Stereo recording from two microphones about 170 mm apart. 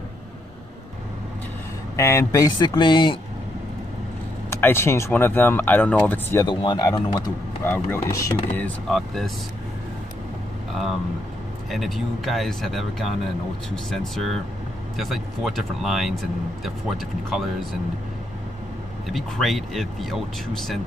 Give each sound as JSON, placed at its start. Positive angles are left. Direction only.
{"t": 2.0, "sound": "speech", "side_deg": 15}
{"t": 4.5, "sound": "speech", "side_deg": 15}
{"t": 6.4, "sound": "speech", "side_deg": 25}
{"t": 7.6, "sound": "speech", "side_deg": 15}
{"t": 11.7, "sound": "speech", "side_deg": 0}
{"t": 19.0, "sound": "speech", "side_deg": 0}